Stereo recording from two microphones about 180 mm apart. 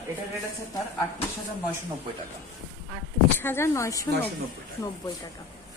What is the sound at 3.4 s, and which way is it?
Speech, 15° left (ahead or behind).